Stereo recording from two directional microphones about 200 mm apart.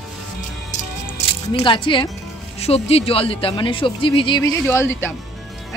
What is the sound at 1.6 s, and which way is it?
Speech, 25° left (ahead or behind).